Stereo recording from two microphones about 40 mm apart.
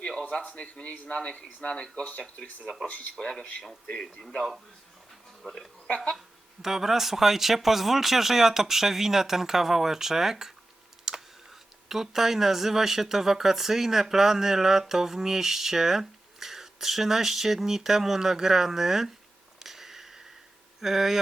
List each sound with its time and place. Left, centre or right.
0.4 s speech: left
2.8 s speech: left
3.2 s speech: centre
5.4 s speech: centre
11.1 s a sound: centre
11.9 s speech: centre
19.5 s a sound: centre
20.8 s speech: centre